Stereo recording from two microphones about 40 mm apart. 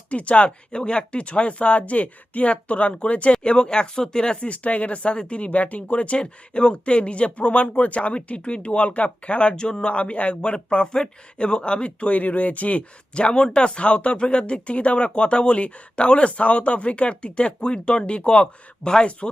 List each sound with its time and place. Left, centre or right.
0.1 s speech: left
3.4 s speech: left
4.4 s speech: left
12.1 s speech: left